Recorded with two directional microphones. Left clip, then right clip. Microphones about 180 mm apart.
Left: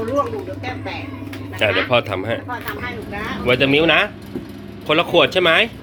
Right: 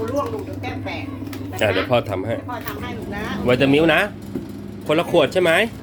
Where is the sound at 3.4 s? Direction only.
25° right (ahead or behind).